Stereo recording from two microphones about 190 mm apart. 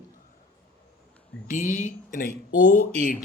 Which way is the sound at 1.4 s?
45° left (ahead or behind).